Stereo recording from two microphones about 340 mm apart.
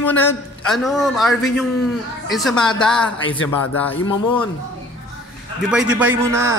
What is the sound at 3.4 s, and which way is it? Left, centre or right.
Speech, left.